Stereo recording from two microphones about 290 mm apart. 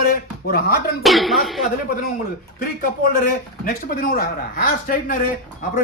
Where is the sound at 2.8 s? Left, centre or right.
Left.